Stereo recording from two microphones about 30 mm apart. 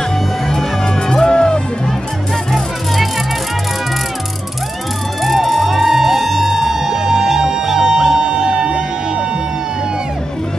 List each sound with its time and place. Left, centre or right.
1.1 s music: left
5.2 s music: centre; by 8.8 s right